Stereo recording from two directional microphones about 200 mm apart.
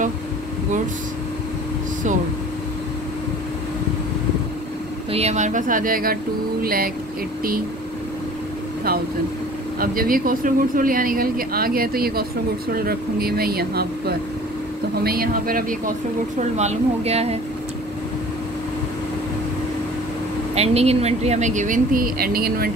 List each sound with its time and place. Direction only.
5.1 s speech: 35° right (ahead or behind)
9.8 s speech: 45° right (ahead or behind)
16.3 s speech: 35° right (ahead or behind)
20.5 s speech: 30° right (ahead or behind); by 22.7 s 50° right (ahead or behind)